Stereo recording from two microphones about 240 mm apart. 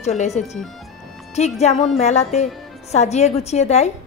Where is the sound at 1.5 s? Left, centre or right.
Left.